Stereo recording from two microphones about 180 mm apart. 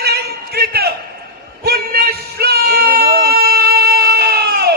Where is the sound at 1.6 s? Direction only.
60° right (ahead or behind).